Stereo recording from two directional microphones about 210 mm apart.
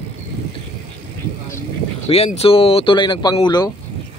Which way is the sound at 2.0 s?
30° left (ahead or behind).